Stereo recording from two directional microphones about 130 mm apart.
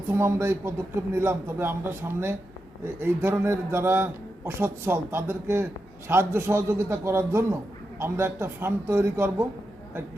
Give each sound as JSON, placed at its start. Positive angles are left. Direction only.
{"t": 0.1, "sound": "a man's voice", "side_deg": -20}